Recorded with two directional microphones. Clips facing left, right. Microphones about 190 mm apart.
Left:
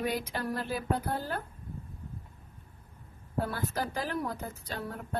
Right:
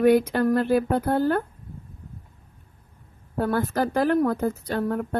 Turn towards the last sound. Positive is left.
turn(degrees=-60)  # may be behind; listen again after turning